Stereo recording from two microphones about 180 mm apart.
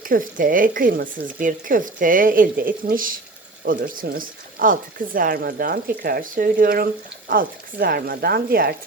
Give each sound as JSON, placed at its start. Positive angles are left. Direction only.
{"t": 0.1, "sound": "speech", "side_deg": -50}